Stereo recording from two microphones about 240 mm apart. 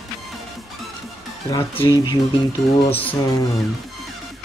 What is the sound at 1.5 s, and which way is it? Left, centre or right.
Speech, centre.